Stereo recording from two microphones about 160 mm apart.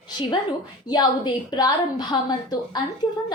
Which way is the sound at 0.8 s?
25° left (ahead or behind).